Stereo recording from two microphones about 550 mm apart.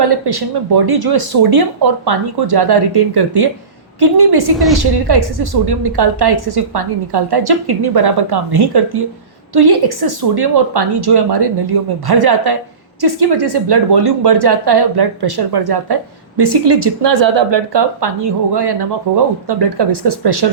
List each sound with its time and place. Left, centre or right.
0.0 s a woman's voice: right